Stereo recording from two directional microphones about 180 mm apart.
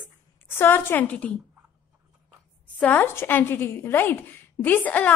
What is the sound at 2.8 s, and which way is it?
A woman's voice, 10° left (ahead or behind).